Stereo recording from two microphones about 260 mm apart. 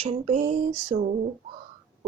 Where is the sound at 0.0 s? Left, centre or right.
Right.